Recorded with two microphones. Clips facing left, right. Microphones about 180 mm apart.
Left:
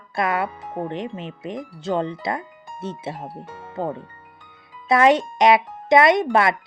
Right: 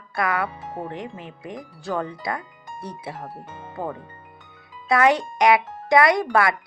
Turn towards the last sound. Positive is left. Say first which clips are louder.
# left 2 dB
turn(degrees=25)  # may be behind; listen again after turning